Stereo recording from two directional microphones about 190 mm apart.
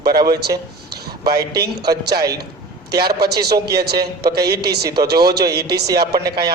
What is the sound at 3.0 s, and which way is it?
A man's voice, 55° right (ahead or behind).